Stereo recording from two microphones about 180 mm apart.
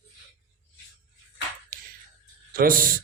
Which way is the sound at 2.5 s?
50° right (ahead or behind).